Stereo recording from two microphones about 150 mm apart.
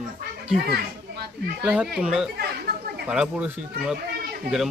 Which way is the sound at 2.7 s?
90° right.